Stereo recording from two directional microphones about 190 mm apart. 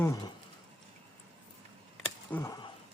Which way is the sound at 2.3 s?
15° left (ahead or behind).